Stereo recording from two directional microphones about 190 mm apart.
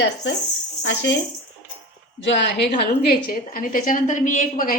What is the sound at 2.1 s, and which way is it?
Speech, 70° left (ahead or behind).